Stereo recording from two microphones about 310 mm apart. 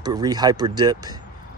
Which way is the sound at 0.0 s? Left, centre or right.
Centre.